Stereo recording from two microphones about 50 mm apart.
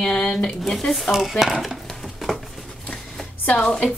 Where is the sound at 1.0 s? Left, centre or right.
Centre.